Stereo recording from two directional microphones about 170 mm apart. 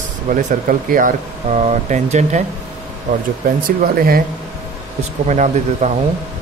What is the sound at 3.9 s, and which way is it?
Speech, 60° right (ahead or behind).